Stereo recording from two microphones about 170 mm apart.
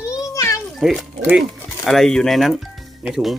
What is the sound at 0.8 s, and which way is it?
Speech, centre (ahead or behind).